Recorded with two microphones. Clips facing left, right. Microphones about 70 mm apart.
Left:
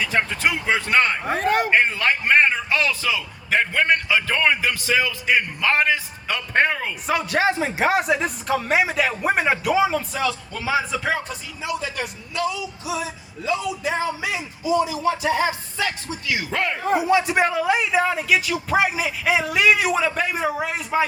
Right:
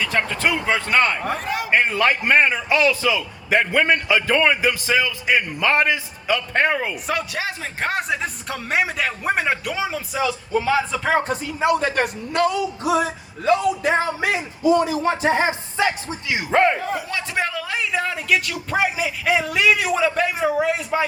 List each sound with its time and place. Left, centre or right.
0.0 s a man's voice: centre
1.4 s a man's voice: left
1.7 s a man's voice: centre
7.6 s a man's voice: centre
11.2 s a man's voice: right
16.9 s a man's voice: centre